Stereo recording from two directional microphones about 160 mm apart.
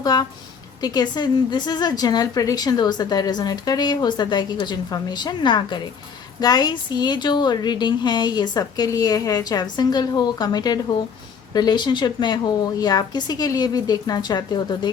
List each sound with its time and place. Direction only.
0.0 s a woman's voice: 25° left (ahead or behind)